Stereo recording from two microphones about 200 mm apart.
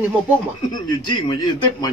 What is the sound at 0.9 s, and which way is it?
Speech, 20° left (ahead or behind).